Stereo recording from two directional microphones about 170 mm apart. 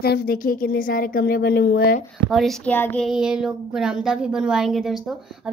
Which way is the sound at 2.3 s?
Centre (ahead or behind).